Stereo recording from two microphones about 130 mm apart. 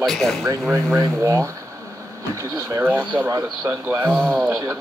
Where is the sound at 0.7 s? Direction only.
25° right (ahead or behind).